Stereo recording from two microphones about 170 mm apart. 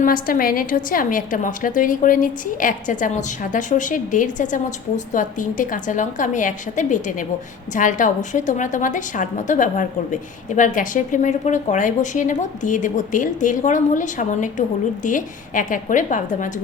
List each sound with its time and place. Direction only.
0.0 s a woman's voice: 55° left (ahead or behind)